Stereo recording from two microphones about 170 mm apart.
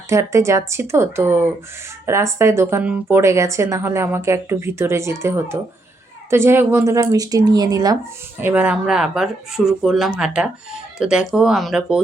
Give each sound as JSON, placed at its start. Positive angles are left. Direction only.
{"t": 0.1, "sound": "speech", "side_deg": -15}
{"t": 8.4, "sound": "speech", "side_deg": -10}